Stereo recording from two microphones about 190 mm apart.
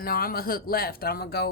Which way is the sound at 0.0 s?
50° left (ahead or behind).